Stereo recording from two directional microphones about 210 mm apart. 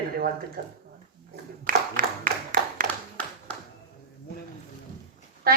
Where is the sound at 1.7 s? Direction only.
40° right (ahead or behind).